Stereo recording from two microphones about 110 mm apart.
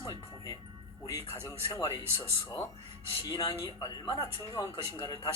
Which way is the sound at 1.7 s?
25° left (ahead or behind).